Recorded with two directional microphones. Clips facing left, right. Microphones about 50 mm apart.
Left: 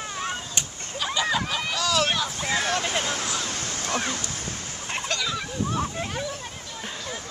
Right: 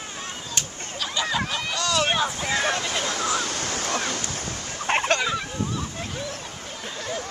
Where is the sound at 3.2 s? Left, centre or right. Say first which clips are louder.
Right 4 dB; right.